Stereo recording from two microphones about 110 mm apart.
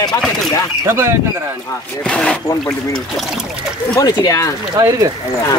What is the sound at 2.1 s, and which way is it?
Speech, 10° left (ahead or behind).